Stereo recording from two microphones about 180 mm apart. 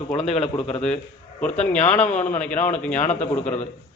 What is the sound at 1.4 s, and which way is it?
Speech, 5° left (ahead or behind).